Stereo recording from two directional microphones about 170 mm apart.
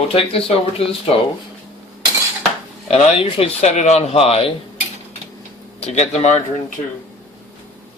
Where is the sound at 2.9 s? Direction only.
35° left (ahead or behind).